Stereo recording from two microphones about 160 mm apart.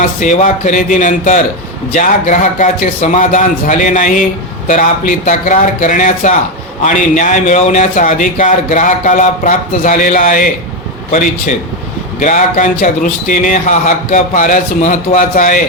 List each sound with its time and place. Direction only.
0.0 s a man's voice: 50° left (ahead or behind)